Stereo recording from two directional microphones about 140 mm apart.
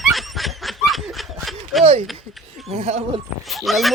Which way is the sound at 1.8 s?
50° right (ahead or behind).